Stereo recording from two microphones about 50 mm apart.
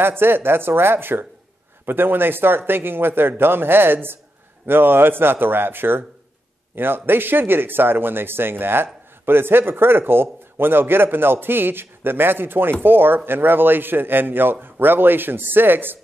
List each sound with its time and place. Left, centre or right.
0.0 s speech: right